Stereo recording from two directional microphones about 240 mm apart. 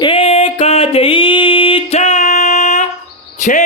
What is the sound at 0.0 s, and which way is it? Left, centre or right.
Music, left.